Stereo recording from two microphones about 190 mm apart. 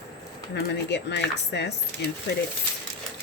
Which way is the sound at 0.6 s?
65° left (ahead or behind).